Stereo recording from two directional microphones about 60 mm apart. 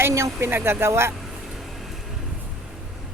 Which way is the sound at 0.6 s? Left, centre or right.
Right.